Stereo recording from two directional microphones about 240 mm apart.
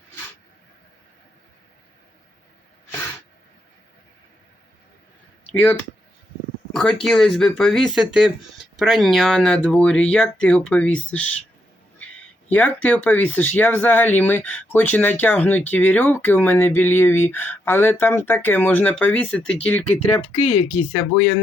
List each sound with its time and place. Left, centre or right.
5.5 s speech: centre
6.7 s speech: centre
12.5 s speech: centre
20.2 s speech: left